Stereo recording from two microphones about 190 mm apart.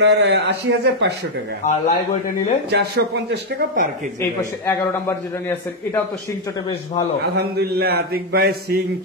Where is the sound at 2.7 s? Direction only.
60° right (ahead or behind).